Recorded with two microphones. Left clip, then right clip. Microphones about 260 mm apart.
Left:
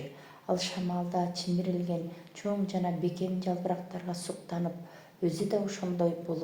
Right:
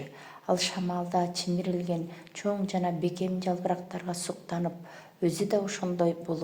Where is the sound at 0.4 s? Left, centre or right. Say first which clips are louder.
Right 4 dB; right.